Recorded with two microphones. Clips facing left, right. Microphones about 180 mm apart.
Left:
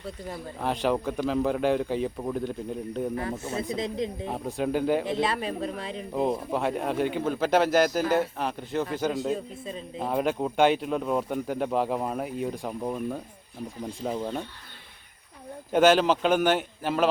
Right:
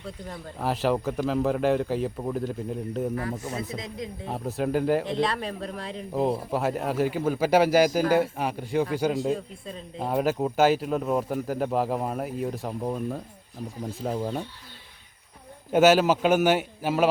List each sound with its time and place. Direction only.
0.0 s a man's voice: centre (ahead or behind)
3.4 s speech: 25° left (ahead or behind)
4.3 s a man's voice: centre (ahead or behind)
15.7 s a man's voice: 5° right (ahead or behind)